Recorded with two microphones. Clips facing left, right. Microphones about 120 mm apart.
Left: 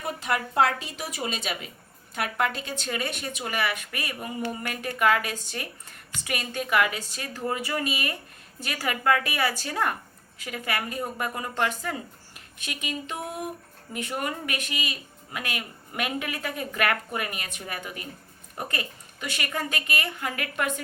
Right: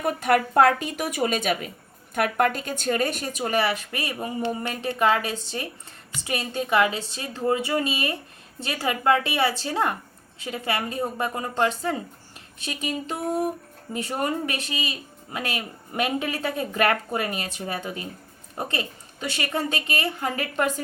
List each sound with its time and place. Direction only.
0.0 s a woman's voice: 55° right (ahead or behind); by 20.8 s 35° right (ahead or behind)